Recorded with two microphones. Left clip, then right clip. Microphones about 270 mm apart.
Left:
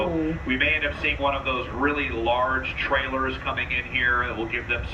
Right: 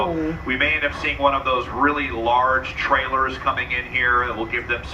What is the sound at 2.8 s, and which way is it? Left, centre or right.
Speech, centre.